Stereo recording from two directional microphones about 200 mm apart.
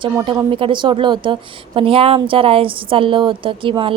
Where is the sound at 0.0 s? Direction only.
20° right (ahead or behind).